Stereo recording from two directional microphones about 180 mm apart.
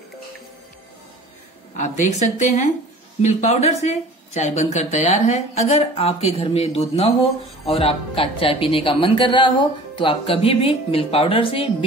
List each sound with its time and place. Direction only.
1.8 s speech: 40° left (ahead or behind)